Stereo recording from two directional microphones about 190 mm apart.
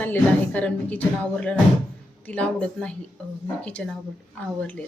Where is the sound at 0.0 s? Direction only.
10° left (ahead or behind).